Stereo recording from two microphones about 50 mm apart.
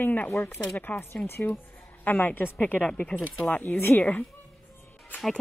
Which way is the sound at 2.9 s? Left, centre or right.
Left.